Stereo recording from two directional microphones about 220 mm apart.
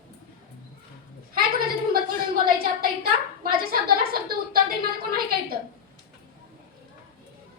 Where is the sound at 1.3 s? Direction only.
45° right (ahead or behind).